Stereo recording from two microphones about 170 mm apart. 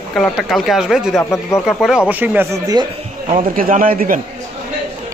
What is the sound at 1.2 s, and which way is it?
Speech, 15° left (ahead or behind).